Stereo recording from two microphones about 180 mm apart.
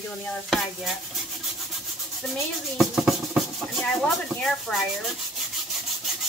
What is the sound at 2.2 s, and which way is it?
Speech, centre (ahead or behind).